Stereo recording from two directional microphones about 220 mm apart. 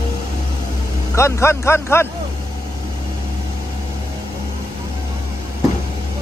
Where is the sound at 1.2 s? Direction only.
10° left (ahead or behind).